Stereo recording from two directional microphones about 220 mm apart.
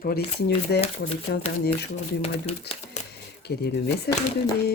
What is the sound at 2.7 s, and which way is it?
Speech, 50° left (ahead or behind).